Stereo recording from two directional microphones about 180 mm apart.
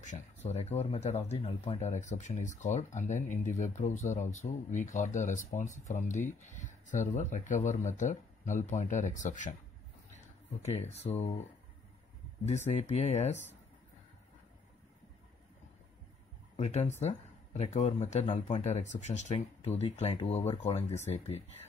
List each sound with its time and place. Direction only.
0.0 s speech: 40° left (ahead or behind)
10.6 s speech: 35° left (ahead or behind)
12.6 s speech: 35° left (ahead or behind)
16.5 s speech: 35° left (ahead or behind)